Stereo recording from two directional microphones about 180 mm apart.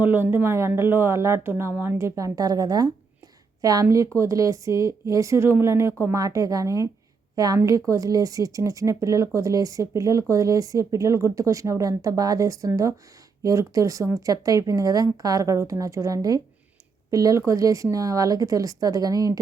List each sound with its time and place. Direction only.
0.0 s a woman's voice: 10° right (ahead or behind)